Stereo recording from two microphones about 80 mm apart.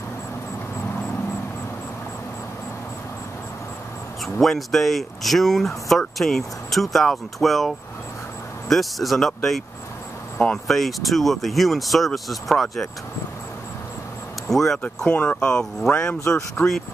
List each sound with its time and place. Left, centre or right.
4.4 s speech: centre
14.5 s speech: centre
15.0 s speech: centre
16.3 s speech: left